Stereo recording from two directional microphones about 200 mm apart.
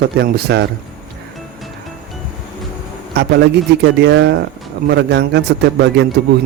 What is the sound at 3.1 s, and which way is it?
A man's voice, 55° right (ahead or behind).